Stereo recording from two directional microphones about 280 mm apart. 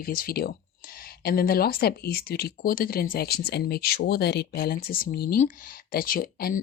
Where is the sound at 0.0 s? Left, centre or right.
Left.